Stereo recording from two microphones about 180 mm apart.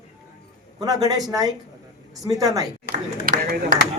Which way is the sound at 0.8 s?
20° right (ahead or behind).